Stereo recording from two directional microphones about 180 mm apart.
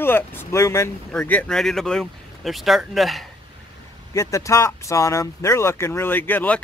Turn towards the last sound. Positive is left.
turn(degrees=10)  # may be behind; listen again after turning